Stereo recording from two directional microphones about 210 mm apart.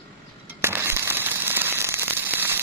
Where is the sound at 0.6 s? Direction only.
10° right (ahead or behind).